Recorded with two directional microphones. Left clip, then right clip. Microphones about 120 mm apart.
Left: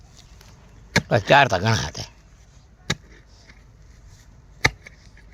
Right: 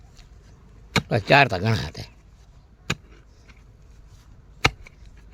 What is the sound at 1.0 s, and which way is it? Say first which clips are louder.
Speech: left 2 dB; 30° right (ahead or behind).